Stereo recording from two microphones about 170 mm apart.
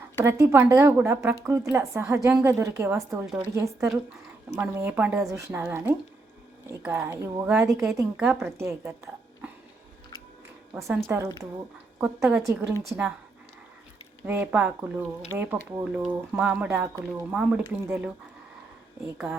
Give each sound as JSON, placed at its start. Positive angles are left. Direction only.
{"t": 0.2, "sound": "speech", "side_deg": -15}
{"t": 11.0, "sound": "speech", "side_deg": -15}
{"t": 14.3, "sound": "speech", "side_deg": -10}
{"t": 19.1, "sound": "speech", "side_deg": -5}